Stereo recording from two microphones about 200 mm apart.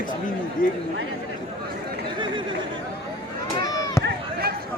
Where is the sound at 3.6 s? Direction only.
20° left (ahead or behind).